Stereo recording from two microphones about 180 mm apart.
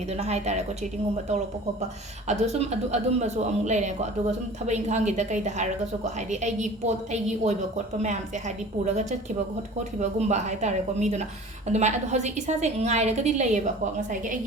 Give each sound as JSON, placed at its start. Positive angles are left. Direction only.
{"t": 0.1, "sound": "speech", "side_deg": -35}
{"t": 2.2, "sound": "speech", "side_deg": -35}